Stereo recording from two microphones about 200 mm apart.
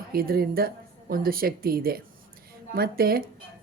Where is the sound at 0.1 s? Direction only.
50° right (ahead or behind).